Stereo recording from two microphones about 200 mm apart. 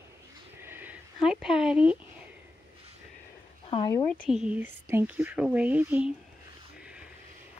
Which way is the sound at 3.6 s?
25° left (ahead or behind).